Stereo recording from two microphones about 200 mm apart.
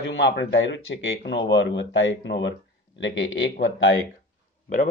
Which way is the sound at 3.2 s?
70° left (ahead or behind).